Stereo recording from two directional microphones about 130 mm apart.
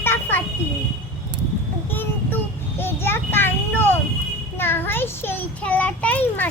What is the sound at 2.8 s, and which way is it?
A child's voice, 15° left (ahead or behind).